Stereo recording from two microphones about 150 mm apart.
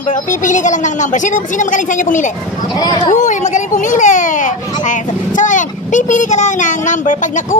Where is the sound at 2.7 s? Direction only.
25° left (ahead or behind).